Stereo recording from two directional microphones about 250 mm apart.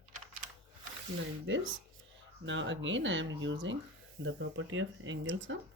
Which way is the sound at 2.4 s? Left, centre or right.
Right.